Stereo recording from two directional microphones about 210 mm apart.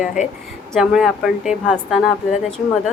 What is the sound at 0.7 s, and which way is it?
A woman's voice, centre (ahead or behind).